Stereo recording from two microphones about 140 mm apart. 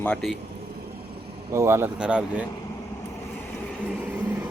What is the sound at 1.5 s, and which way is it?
Speech, 20° right (ahead or behind).